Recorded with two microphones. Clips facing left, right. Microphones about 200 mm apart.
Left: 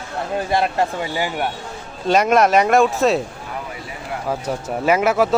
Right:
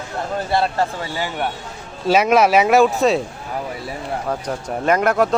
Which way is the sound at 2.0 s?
5° right (ahead or behind).